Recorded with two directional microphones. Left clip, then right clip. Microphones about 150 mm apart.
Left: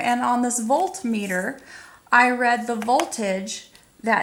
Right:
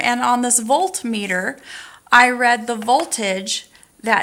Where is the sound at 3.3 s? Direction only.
45° right (ahead or behind).